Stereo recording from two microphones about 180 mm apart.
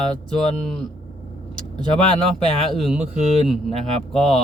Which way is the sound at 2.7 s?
Centre (ahead or behind).